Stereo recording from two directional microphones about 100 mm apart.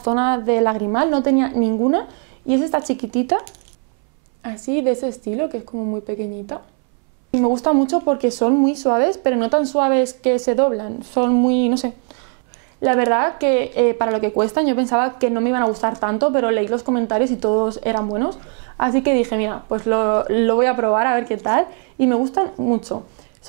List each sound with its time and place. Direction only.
0.0 s speech: 15° right (ahead or behind)
4.5 s a woman's voice: 20° right (ahead or behind)
7.2 s speech: 15° right (ahead or behind)